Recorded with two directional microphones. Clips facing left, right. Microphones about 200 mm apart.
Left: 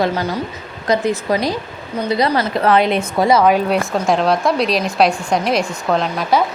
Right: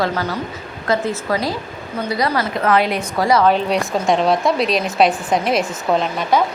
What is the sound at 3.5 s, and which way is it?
A woman's voice, 5° left (ahead or behind).